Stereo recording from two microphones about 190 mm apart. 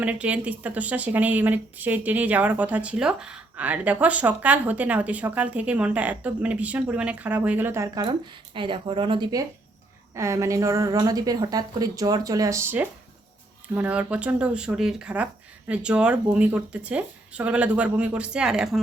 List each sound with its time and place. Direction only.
0.0 s speech: 5° right (ahead or behind); by 9.4 s 25° right (ahead or behind)
10.2 s speech: 15° right (ahead or behind)